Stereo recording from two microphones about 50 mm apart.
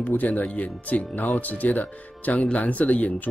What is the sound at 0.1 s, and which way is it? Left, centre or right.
Speech, left.